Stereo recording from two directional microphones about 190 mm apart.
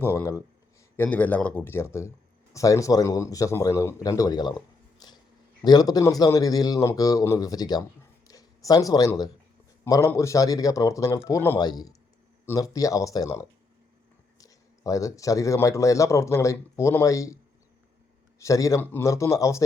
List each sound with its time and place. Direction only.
0.0 s speech: 15° left (ahead or behind)
4.9 s a sound: 20° left (ahead or behind)
5.6 s a man's voice: 20° left (ahead or behind)